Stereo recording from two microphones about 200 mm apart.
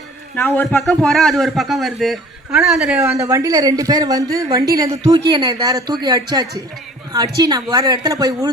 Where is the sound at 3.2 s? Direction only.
15° right (ahead or behind).